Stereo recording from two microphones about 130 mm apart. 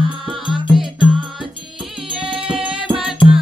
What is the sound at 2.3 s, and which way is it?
Music, 45° right (ahead or behind).